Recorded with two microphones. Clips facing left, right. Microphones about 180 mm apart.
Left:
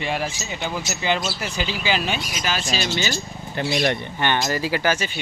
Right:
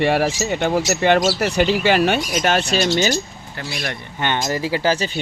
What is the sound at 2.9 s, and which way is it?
Speech, 45° right (ahead or behind).